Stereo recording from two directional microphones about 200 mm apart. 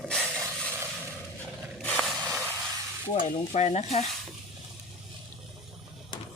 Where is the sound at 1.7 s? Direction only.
5° left (ahead or behind).